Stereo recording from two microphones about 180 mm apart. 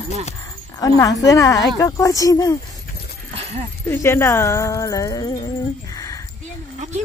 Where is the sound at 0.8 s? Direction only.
20° left (ahead or behind).